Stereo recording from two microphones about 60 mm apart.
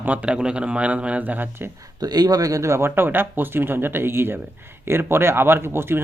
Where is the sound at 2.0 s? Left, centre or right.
Right.